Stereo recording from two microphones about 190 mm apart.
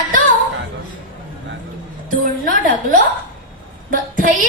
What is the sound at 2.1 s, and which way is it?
Speech, 45° right (ahead or behind).